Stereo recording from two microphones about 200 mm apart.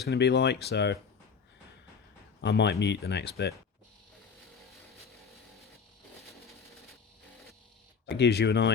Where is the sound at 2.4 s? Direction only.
60° left (ahead or behind).